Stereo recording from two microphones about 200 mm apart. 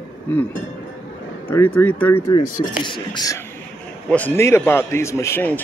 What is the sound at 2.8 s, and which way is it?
Speech, 20° left (ahead or behind).